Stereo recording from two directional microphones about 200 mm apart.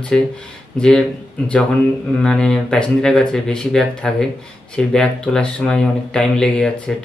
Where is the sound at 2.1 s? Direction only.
5° left (ahead or behind).